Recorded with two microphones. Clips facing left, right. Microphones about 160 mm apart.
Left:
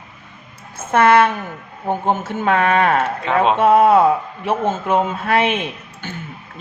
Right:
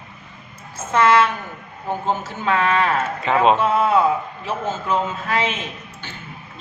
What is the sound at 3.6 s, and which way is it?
A man's voice, 60° left (ahead or behind).